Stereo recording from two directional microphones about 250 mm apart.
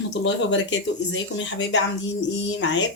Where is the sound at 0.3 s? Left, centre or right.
Left.